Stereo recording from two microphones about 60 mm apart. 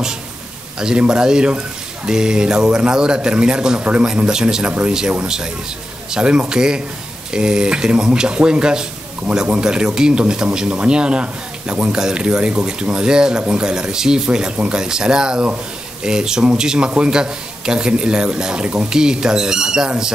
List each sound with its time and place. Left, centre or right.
0.7 s speech: centre